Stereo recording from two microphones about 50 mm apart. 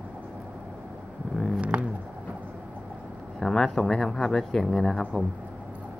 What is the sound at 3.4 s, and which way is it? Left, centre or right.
Speech, centre.